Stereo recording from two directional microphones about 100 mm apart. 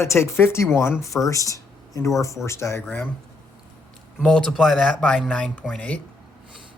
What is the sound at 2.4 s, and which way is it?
Speech, 30° left (ahead or behind).